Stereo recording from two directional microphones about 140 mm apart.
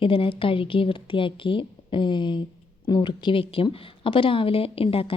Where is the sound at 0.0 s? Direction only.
40° left (ahead or behind).